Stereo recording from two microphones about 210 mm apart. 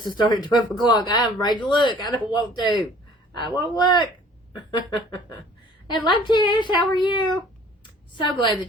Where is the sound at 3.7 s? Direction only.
20° left (ahead or behind).